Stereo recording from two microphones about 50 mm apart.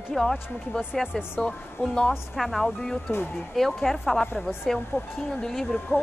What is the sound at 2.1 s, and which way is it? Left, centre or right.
Speech, centre.